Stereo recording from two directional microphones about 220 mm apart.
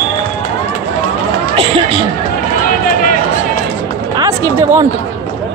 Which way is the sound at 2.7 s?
40° left (ahead or behind).